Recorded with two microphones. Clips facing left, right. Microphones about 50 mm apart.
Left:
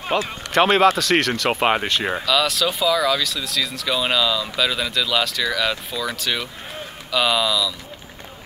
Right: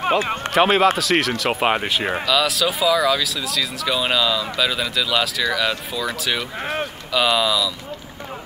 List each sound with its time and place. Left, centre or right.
0.5 s speech: centre
6.6 s a sound: right
7.1 s speech: centre